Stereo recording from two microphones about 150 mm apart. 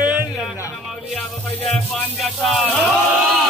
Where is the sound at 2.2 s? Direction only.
Centre (ahead or behind).